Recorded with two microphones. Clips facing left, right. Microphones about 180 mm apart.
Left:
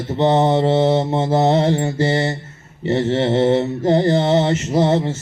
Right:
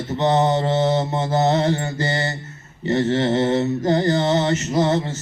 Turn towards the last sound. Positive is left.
turn(degrees=30)  # may be behind; listen again after turning